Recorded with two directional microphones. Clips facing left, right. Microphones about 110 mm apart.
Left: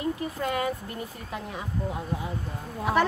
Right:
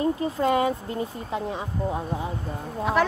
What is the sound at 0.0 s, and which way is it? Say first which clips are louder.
Speech: right 6 dB; 25° right (ahead or behind).